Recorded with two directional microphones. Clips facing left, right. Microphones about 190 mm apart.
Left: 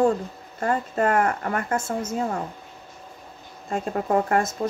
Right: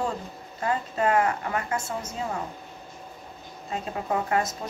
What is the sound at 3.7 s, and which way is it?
Speech, 50° left (ahead or behind).